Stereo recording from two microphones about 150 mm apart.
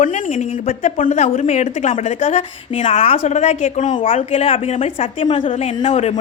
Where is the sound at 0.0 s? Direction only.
60° left (ahead or behind).